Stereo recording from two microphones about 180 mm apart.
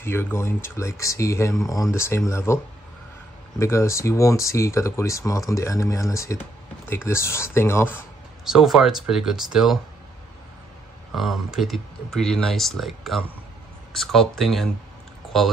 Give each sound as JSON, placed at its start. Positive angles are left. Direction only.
{"t": 0.0, "sound": "speech", "side_deg": 10}
{"t": 8.5, "sound": "speech", "side_deg": 0}
{"t": 11.1, "sound": "speech", "side_deg": 0}